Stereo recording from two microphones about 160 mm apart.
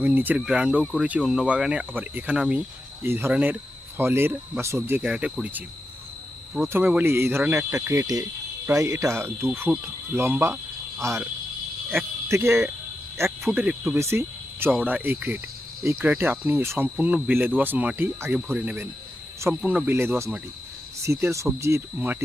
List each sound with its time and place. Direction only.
0.0 s speech: 10° right (ahead or behind)
12.3 s speech: 15° right (ahead or behind)
13.4 s speech: 5° right (ahead or behind)